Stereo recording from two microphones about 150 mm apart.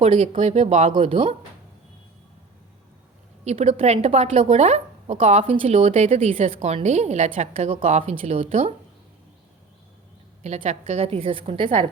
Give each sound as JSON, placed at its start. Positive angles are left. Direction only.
{"t": 0.0, "sound": "a woman's voice", "side_deg": -40}
{"t": 3.4, "sound": "a woman's voice", "side_deg": -50}
{"t": 10.4, "sound": "a woman's voice", "side_deg": -50}